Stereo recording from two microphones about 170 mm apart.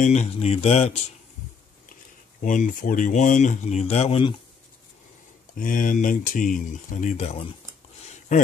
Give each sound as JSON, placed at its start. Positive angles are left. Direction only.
{"t": 0.0, "sound": "speech", "side_deg": 40}
{"t": 2.4, "sound": "speech", "side_deg": 50}
{"t": 5.5, "sound": "speech", "side_deg": 55}